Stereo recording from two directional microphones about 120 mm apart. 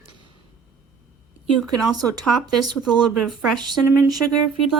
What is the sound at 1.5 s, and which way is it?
Speech, centre (ahead or behind).